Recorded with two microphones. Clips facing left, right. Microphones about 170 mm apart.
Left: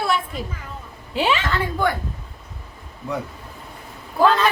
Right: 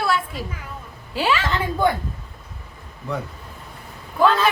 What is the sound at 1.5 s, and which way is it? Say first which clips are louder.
Speech: right 1 dB; 20° right (ahead or behind).